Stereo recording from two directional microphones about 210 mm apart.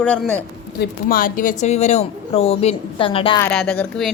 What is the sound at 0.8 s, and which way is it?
Speech, 45° left (ahead or behind).